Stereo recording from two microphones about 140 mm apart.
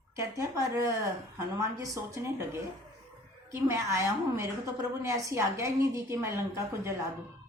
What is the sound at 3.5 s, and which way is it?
A woman's voice, 20° right (ahead or behind).